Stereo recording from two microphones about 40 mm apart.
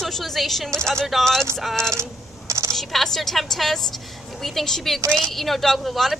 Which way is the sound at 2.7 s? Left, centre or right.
Centre.